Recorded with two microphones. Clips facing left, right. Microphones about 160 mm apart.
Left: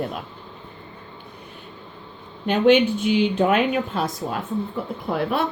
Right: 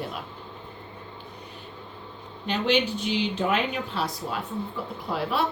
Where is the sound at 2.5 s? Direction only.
50° left (ahead or behind).